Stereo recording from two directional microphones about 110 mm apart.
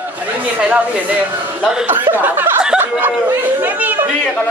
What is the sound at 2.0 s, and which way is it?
Speech, 15° right (ahead or behind).